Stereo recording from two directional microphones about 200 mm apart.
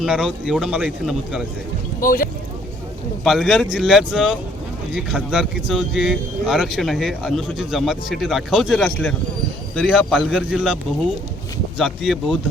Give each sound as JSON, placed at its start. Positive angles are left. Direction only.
{"t": 0.0, "sound": "speech", "side_deg": -5}
{"t": 2.0, "sound": "speech", "side_deg": 45}
{"t": 3.2, "sound": "speech", "side_deg": 0}
{"t": 11.8, "sound": "speech", "side_deg": 0}